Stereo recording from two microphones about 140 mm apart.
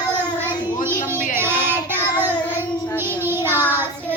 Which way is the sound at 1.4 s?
15° right (ahead or behind).